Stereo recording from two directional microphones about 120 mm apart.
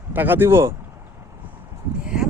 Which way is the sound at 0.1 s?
15° right (ahead or behind).